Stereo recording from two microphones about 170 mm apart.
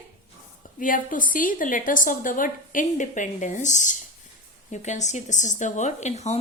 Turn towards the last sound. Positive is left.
turn(degrees=40)  # may be behind; listen again after turning